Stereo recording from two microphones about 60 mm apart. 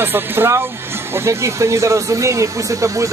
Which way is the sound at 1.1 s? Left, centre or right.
Right.